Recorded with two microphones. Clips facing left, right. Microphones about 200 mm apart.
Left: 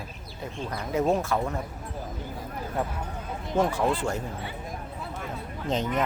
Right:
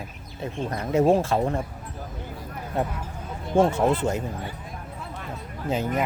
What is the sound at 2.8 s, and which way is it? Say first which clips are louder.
Speech: right 4 dB; 25° right (ahead or behind).